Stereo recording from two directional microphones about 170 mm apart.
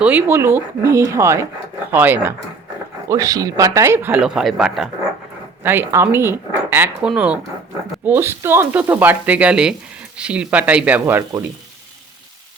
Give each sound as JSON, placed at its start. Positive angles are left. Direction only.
{"t": 0.0, "sound": "speech", "side_deg": -10}
{"t": 5.6, "sound": "speech", "side_deg": -15}